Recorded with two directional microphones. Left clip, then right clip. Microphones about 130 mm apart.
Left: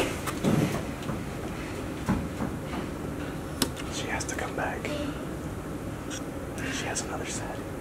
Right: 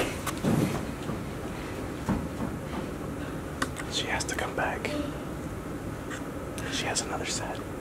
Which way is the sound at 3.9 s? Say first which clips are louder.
Right 3 dB; 15° right (ahead or behind).